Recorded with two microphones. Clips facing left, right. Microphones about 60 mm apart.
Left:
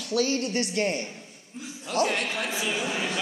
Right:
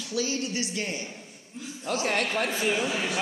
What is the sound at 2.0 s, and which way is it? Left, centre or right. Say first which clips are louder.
Speech: right 1 dB; right.